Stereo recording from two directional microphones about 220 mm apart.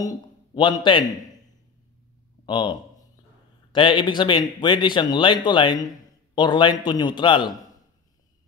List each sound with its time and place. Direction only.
0.0 s a man's voice: 20° left (ahead or behind)
2.4 s speech: 20° left (ahead or behind)